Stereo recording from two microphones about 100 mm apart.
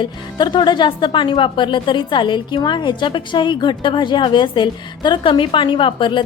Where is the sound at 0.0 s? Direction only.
50° left (ahead or behind).